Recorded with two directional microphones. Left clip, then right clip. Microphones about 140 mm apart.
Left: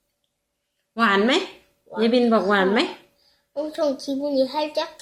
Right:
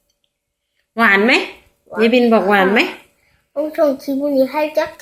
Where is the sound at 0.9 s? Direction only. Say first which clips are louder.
Right 7 dB; 10° left (ahead or behind).